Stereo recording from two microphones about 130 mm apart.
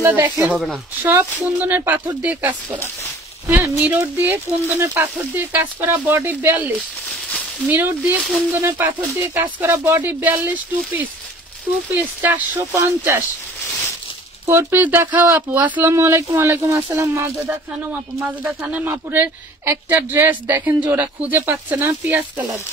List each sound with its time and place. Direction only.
0.0 s a woman's voice: 15° right (ahead or behind)
12.0 s a woman's voice: 10° right (ahead or behind)
14.4 s a woman's voice: 20° right (ahead or behind)